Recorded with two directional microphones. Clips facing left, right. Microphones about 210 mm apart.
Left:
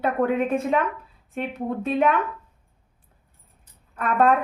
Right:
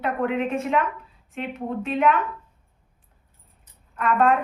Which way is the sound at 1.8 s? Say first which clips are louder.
Even; 35° left (ahead or behind).